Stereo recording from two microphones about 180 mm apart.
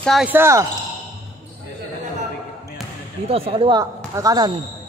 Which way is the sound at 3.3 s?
30° right (ahead or behind).